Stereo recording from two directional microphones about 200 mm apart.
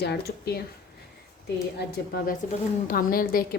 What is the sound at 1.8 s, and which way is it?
A woman's voice, 50° left (ahead or behind).